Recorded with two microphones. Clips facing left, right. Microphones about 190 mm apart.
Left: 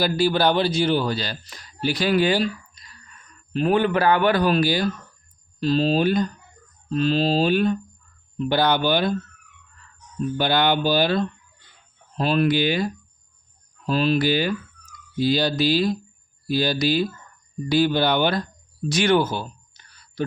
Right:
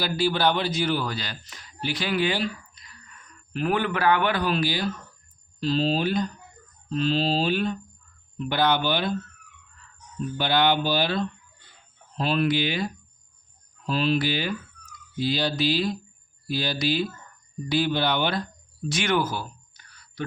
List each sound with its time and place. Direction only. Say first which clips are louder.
0.0 s a man's voice: left 4 dB; 40° left (ahead or behind)
3.5 s a man's voice: left 6 dB; 30° left (ahead or behind); by 7.8 s 50° left (ahead or behind)
8.4 s a man's voice: left 3 dB; 35° left (ahead or behind)
10.3 s a man's voice: left 1 dB; 45° left (ahead or behind)
18.9 s a sound: left 5 dB; 35° left (ahead or behind)